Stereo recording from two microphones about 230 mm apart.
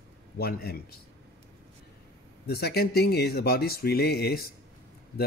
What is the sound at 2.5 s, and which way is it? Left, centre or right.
Speech, left.